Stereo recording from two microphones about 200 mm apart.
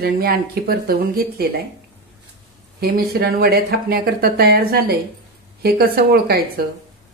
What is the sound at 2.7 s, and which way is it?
Speech, 50° right (ahead or behind).